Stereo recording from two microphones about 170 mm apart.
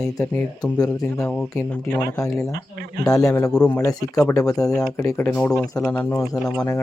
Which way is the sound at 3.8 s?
20° left (ahead or behind).